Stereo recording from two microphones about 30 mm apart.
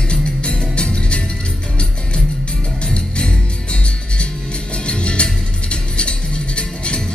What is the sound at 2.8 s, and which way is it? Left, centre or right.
Music, left.